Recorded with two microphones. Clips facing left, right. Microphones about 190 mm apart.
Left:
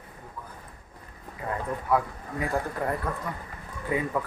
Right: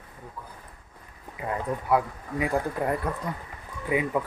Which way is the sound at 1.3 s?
15° right (ahead or behind).